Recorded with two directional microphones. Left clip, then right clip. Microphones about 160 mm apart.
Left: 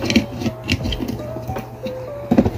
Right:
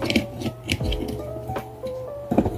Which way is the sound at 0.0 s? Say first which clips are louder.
Left 4 dB; centre (ahead or behind).